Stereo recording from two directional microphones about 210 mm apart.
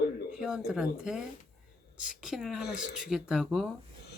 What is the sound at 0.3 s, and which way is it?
Speech, 5° right (ahead or behind).